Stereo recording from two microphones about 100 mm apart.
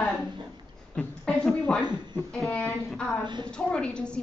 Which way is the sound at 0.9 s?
10° left (ahead or behind).